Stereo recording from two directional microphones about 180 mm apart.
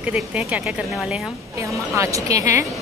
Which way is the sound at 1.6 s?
15° right (ahead or behind).